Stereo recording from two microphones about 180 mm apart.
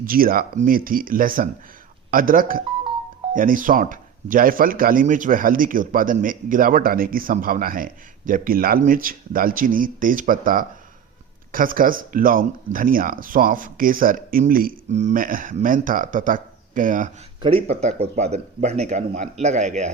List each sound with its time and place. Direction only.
0.0 s speech: 50° right (ahead or behind)
17.4 s speech: 35° right (ahead or behind)